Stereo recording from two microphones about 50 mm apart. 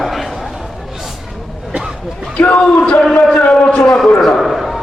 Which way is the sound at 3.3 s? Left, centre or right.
Left.